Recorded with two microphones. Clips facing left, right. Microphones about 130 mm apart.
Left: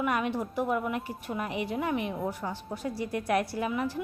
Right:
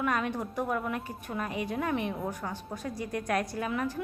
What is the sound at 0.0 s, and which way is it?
A woman's voice, 10° left (ahead or behind).